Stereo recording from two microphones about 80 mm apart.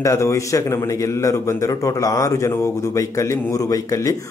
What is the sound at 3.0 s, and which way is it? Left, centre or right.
Speech, left.